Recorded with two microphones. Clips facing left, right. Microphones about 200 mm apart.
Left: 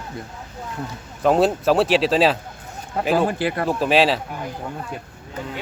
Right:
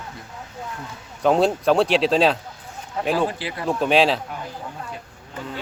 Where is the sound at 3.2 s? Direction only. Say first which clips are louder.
Left 5 dB; 55° left (ahead or behind).